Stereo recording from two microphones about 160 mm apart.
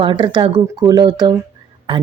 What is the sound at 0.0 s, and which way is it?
Speech, 30° right (ahead or behind).